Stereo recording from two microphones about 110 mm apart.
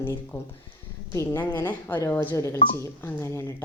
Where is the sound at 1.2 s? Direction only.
25° left (ahead or behind).